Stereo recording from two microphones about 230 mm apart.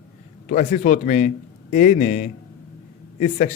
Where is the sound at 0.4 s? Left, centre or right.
Left.